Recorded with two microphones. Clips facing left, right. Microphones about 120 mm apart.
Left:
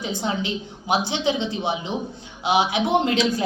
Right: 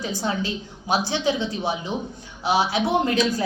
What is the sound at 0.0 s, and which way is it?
A woman's voice, 20° left (ahead or behind).